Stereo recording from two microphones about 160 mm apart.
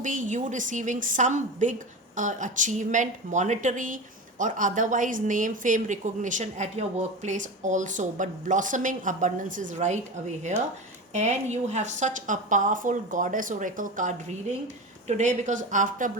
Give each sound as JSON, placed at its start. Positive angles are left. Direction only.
{"t": 0.0, "sound": "a woman's voice", "side_deg": -55}
{"t": 11.1, "sound": "a woman's voice", "side_deg": -45}